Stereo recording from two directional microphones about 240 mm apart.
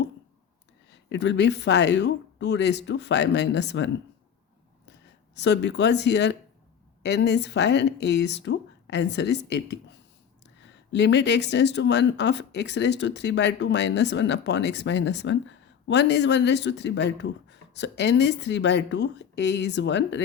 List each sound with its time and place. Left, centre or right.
0.9 s speech: left
4.9 s speech: left
10.9 s speech: left